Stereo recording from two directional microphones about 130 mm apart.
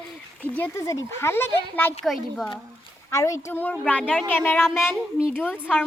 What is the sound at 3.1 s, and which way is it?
Speech, 25° left (ahead or behind).